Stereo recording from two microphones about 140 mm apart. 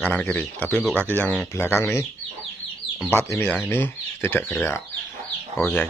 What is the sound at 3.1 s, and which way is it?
Speech, 15° left (ahead or behind).